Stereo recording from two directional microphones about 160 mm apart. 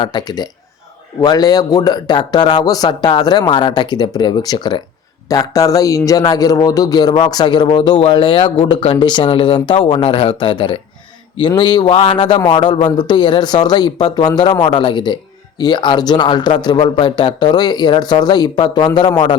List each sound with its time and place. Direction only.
0.0 s speech: 25° left (ahead or behind)